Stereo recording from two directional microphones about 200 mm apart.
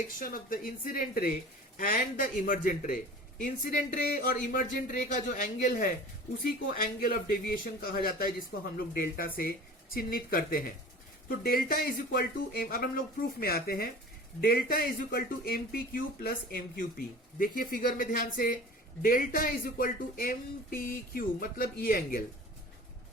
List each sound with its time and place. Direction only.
0.2 s speech: 45° left (ahead or behind)